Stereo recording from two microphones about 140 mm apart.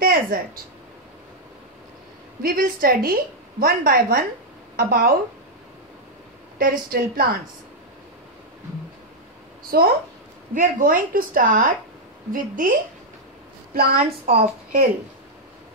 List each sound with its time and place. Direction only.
0.0 s a sound: 90° right
2.4 s a woman's voice: 90° right
6.9 s a woman's voice: 90° right
9.7 s a woman's voice: 90° right
10.5 s a woman's voice: 70° right (ahead or behind)
13.7 s a woman's voice: 90° right